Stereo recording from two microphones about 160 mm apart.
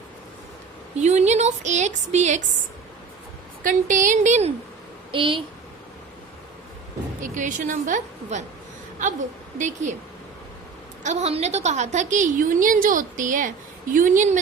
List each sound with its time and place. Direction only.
0.9 s a woman's voice: 45° right (ahead or behind)
3.6 s a woman's voice: 55° right (ahead or behind)
5.1 s a woman's voice: 30° right (ahead or behind)
7.2 s a woman's voice: 55° right (ahead or behind)
9.6 s a woman's voice: 50° right (ahead or behind)
11.0 s a woman's voice: 45° right (ahead or behind)